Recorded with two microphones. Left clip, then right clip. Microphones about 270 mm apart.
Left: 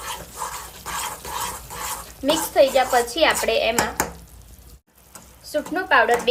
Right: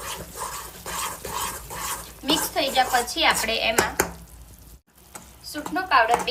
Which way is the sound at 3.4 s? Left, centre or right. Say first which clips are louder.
Left 2 dB; centre.